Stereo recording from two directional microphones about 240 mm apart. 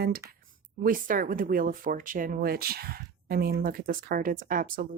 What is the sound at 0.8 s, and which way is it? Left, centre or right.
Speech, right.